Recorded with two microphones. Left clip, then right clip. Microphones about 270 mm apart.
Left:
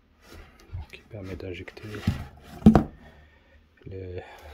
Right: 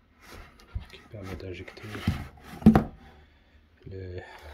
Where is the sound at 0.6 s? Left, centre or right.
Centre.